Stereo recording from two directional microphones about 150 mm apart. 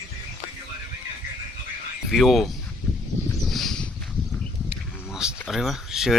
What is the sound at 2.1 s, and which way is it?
Speech, centre (ahead or behind).